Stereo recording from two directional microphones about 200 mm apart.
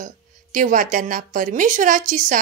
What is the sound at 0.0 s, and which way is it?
A woman's voice, 40° right (ahead or behind).